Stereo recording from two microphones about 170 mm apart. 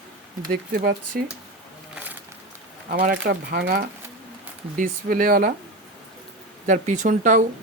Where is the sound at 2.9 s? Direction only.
60° right (ahead or behind).